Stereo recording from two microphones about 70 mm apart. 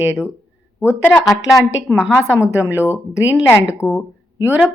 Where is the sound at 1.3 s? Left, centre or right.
Centre; by 2.8 s right.